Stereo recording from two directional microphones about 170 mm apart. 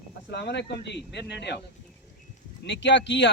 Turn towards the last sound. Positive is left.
turn(degrees=90)